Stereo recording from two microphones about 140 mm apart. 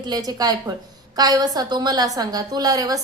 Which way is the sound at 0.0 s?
30° right (ahead or behind).